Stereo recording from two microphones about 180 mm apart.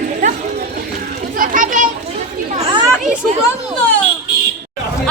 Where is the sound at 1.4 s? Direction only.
45° right (ahead or behind).